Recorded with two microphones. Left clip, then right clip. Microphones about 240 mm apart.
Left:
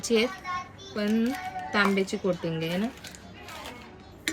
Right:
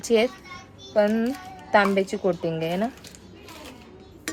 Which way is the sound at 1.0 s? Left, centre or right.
Centre.